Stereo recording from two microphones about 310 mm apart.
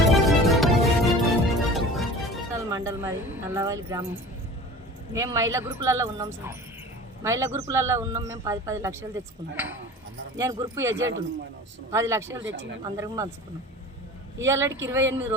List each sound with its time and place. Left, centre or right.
0.0 s music: centre
2.6 s a man's voice: centre
10.9 s speech: right
11.9 s a man's voice: centre
12.4 s speech: right
12.8 s a man's voice: centre
14.4 s a man's voice: centre